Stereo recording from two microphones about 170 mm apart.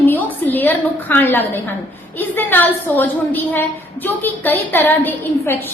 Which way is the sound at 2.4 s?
10° left (ahead or behind).